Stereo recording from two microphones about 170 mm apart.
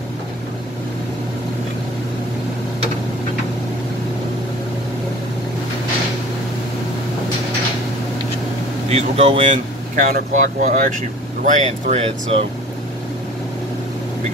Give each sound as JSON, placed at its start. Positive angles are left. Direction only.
{"t": 8.8, "sound": "speech", "side_deg": -40}